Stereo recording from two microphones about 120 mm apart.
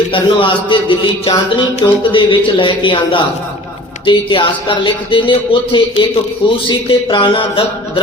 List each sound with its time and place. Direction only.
0.1 s speech: 45° left (ahead or behind)